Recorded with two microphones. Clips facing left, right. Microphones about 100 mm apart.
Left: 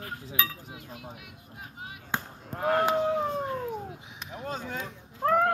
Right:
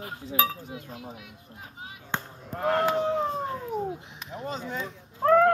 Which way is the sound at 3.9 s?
5° left (ahead or behind).